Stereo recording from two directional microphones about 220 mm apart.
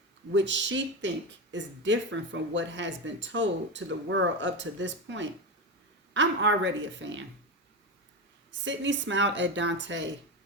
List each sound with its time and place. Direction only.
0.3 s speech: 55° right (ahead or behind)
8.6 s speech: 55° right (ahead or behind)